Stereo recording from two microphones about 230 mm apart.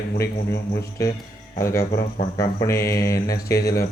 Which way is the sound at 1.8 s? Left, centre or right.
Left.